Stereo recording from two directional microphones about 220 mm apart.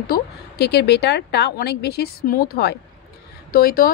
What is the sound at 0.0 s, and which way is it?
A woman's voice, 45° left (ahead or behind).